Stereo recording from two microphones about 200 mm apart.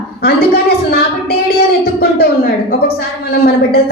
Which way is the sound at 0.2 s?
50° left (ahead or behind).